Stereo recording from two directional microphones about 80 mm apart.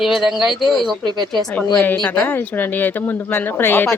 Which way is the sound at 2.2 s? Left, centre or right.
Left.